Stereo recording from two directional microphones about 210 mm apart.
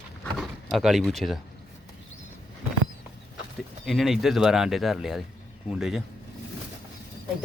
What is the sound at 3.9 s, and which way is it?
Speech, centre (ahead or behind).